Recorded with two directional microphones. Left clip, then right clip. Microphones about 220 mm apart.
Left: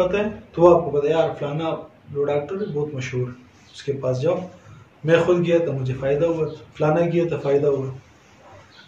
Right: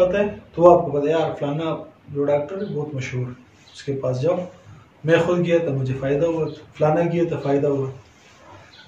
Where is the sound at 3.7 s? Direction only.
15° left (ahead or behind).